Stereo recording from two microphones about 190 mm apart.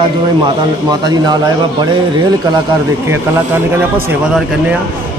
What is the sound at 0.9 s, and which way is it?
Speech, 20° right (ahead or behind).